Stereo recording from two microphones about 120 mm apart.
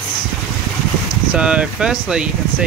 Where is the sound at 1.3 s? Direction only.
10° right (ahead or behind).